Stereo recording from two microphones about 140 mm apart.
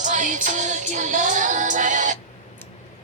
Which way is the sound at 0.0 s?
65° right (ahead or behind).